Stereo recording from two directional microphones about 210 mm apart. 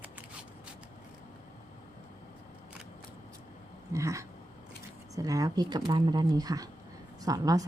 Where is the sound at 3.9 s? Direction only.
15° right (ahead or behind).